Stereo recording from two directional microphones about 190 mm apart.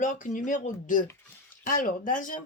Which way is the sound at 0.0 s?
45° left (ahead or behind).